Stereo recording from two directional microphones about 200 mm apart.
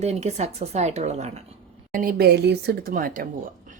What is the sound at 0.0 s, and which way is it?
A woman's voice, 35° right (ahead or behind).